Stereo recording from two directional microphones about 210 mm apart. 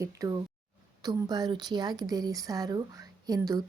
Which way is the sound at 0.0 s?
15° right (ahead or behind).